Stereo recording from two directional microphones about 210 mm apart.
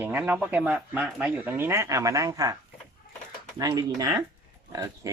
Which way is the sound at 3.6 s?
15° right (ahead or behind).